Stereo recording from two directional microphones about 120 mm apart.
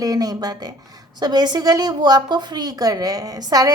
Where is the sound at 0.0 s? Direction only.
30° right (ahead or behind).